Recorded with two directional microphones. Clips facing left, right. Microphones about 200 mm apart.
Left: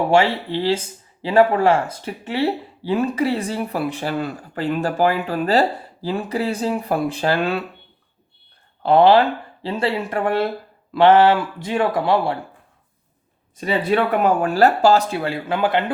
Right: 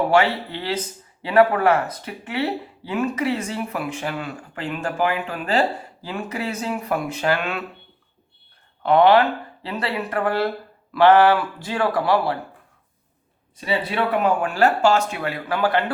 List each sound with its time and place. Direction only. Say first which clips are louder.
0.1 s a man's voice: left 2 dB; 25° left (ahead or behind)
8.8 s a man's voice: left 2 dB; 30° left (ahead or behind)
13.6 s a man's voice: left 5 dB; 50° left (ahead or behind)
14.4 s speech: left 4 dB; 35° left (ahead or behind); by 15.8 s 20° left (ahead or behind)